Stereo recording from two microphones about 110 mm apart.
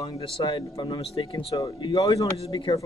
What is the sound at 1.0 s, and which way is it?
Speech, 55° left (ahead or behind).